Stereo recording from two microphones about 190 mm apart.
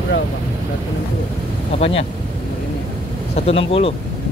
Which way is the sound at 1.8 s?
30° left (ahead or behind).